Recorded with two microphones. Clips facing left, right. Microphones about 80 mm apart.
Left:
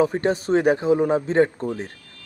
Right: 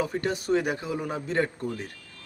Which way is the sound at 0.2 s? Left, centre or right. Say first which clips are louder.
Left 6 dB; left.